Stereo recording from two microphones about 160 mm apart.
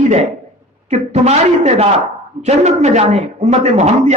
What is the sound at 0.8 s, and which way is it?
A man's voice, 45° right (ahead or behind).